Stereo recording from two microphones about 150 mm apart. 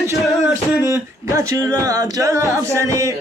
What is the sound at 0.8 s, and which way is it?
Speech, 20° right (ahead or behind).